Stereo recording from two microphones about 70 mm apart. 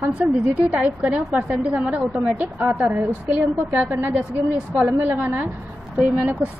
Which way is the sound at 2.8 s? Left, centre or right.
Right.